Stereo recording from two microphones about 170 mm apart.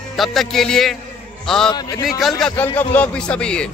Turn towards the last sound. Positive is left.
turn(degrees=5)  # may be behind; listen again after turning